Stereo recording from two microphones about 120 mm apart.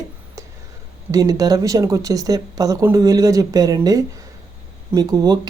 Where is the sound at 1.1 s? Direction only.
30° right (ahead or behind).